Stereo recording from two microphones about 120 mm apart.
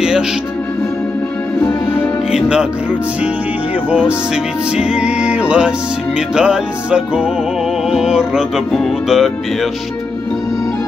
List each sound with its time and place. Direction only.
1.6 s music: 20° left (ahead or behind)
2.3 s music: 10° right (ahead or behind)
4.7 s music: 10° right (ahead or behind)